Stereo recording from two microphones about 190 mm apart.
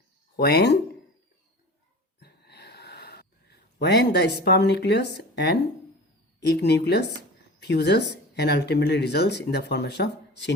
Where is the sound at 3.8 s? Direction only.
60° left (ahead or behind).